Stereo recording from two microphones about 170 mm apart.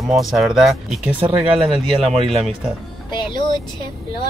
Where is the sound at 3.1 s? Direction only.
25° left (ahead or behind).